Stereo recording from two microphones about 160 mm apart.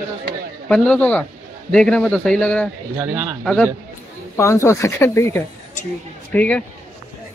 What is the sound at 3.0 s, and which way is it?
Speech, 10° right (ahead or behind).